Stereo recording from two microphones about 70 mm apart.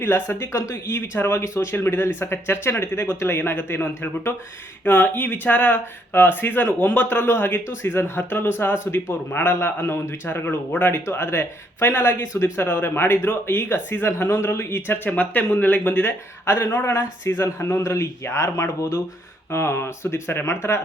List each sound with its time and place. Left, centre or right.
0.0 s a man's voice: left
19.5 s speech: left